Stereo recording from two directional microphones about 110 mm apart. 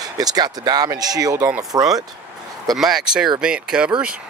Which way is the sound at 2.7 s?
5° right (ahead or behind).